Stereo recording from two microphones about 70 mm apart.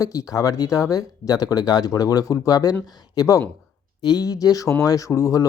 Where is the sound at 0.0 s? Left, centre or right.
Left.